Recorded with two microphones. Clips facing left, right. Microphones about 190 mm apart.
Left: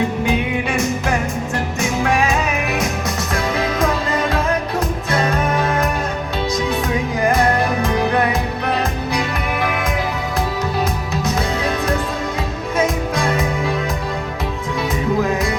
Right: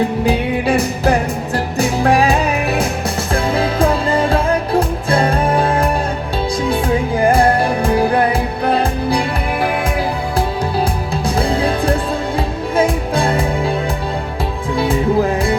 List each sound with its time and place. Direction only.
0.3 s music: 35° right (ahead or behind)
10.8 s music: 30° right (ahead or behind)
14.8 s music: 30° right (ahead or behind)